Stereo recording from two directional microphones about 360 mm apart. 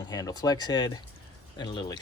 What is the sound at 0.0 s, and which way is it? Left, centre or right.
Speech, centre.